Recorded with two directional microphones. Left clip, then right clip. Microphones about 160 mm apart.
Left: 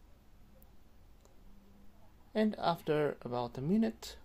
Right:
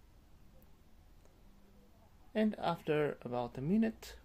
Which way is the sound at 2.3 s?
20° left (ahead or behind).